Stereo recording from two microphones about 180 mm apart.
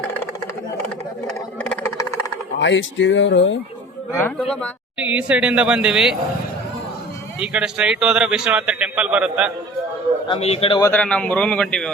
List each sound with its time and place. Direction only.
1.7 s a sound: 15° left (ahead or behind)
2.6 s speech: 85° left
4.9 s speech: 10° right (ahead or behind)
7.3 s a man's voice: 5° right (ahead or behind)
10.2 s a man's voice: 35° left (ahead or behind)
10.8 s a man's voice: 15° left (ahead or behind)
11.0 s speech: 5° left (ahead or behind)